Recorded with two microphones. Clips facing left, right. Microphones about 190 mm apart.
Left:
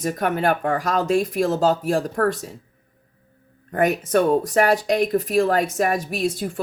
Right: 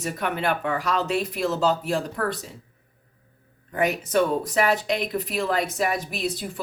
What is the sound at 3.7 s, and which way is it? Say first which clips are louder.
A woman's voice: left 4 dB; 50° left (ahead or behind).